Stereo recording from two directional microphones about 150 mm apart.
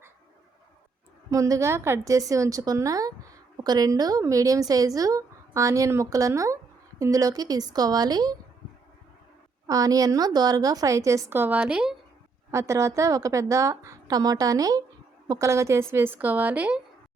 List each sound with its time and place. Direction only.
1.3 s a woman's voice: 20° right (ahead or behind)
9.6 s a woman's voice: 25° right (ahead or behind); by 11.9 s 5° right (ahead or behind)
12.5 s a woman's voice: 20° right (ahead or behind)